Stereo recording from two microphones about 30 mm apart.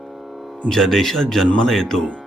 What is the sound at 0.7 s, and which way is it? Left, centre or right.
Speech, centre.